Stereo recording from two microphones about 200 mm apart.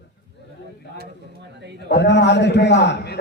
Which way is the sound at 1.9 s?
60° left (ahead or behind).